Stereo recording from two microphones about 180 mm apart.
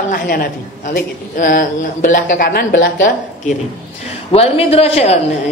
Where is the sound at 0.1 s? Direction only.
50° left (ahead or behind).